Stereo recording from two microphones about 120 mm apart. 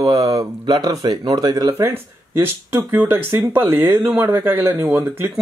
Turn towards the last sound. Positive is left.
turn(degrees=-20)  # may be behind; listen again after turning